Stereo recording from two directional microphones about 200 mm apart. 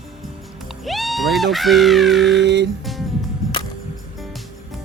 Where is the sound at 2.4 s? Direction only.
60° right (ahead or behind).